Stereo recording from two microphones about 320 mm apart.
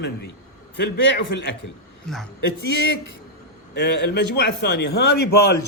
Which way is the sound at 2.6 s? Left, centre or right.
Left.